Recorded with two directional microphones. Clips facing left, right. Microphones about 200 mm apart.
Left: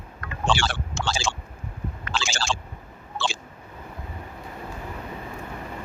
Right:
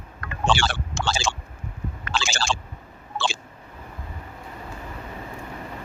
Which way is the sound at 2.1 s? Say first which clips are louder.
Right 2 dB; 65° right (ahead or behind).